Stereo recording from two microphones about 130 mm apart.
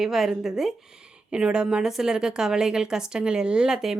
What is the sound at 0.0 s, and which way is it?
A woman's voice, centre (ahead or behind).